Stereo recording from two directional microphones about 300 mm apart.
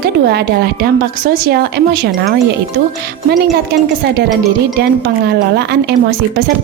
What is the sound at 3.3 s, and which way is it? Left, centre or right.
A woman's voice, right.